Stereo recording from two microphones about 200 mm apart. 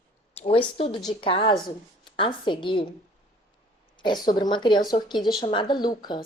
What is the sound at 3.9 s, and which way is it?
Speech, 20° left (ahead or behind).